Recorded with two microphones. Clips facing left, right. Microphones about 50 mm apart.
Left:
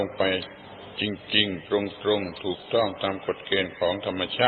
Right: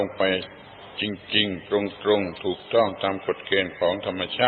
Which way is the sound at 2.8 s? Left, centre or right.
Centre.